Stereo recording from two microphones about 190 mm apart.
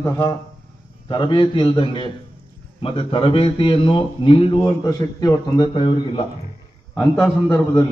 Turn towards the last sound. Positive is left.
turn(degrees=5)  # may be behind; listen again after turning